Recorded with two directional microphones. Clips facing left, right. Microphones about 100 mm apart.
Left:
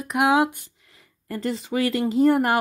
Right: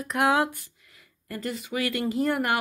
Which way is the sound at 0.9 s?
30° left (ahead or behind).